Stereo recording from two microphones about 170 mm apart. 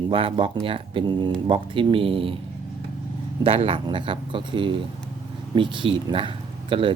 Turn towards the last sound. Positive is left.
turn(degrees=-30)  # may be behind; listen again after turning